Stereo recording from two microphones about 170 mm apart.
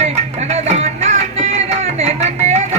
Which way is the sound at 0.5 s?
40° right (ahead or behind).